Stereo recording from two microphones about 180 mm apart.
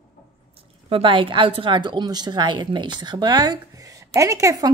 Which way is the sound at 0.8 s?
30° right (ahead or behind).